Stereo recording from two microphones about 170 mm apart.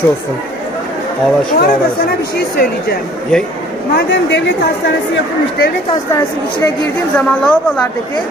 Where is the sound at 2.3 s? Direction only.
70° left (ahead or behind).